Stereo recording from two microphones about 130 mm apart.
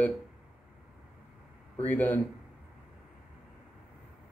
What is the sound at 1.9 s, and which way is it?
Speech, 15° left (ahead or behind).